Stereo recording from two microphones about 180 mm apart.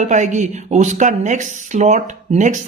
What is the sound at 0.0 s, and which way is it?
Speech, 45° right (ahead or behind).